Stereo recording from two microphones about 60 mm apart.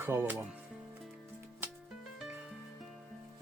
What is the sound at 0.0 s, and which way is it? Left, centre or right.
Speech, right.